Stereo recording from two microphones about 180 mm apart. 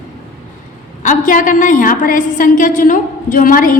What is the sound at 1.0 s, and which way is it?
A woman's voice, 45° left (ahead or behind).